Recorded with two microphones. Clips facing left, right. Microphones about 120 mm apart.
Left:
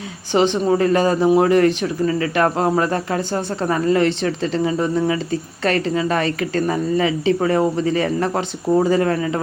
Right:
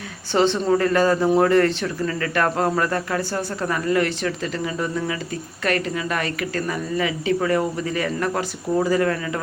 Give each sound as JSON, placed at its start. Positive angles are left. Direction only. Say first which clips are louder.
{"t": 0.3, "sound": "speech", "louder": "left 2 dB", "side_deg": 15}